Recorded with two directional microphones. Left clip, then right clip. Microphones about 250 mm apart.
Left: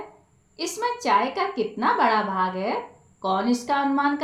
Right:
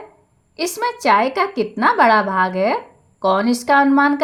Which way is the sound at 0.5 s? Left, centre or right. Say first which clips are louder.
Right 5 dB; right.